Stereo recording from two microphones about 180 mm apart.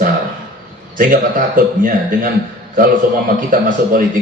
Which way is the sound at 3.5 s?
50° right (ahead or behind).